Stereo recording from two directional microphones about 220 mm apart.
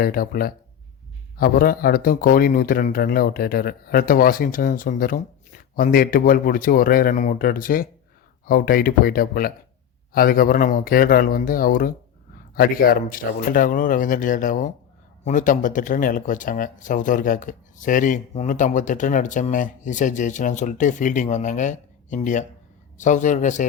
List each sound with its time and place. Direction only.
0.0 s speech: 40° left (ahead or behind)